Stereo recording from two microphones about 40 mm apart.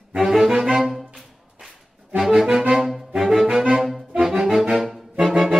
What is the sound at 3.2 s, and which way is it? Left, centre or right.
Music, centre.